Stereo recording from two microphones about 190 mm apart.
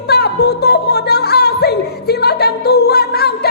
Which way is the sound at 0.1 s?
60° left (ahead or behind).